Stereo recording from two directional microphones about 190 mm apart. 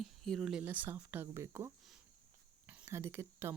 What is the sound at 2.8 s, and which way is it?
Speech, 15° right (ahead or behind).